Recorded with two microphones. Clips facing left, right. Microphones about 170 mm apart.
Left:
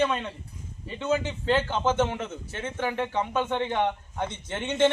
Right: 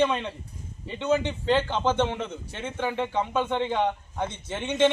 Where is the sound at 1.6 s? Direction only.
5° left (ahead or behind).